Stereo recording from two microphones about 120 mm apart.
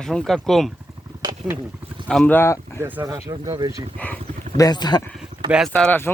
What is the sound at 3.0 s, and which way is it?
Speech, 30° right (ahead or behind).